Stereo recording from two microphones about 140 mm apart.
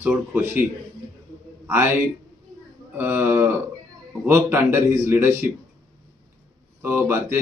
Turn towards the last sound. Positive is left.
turn(degrees=-15)  # may be behind; listen again after turning